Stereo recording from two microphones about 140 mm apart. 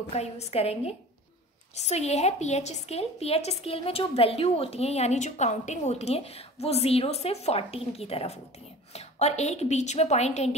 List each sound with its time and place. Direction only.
0.1 s a woman's voice: 50° left (ahead or behind)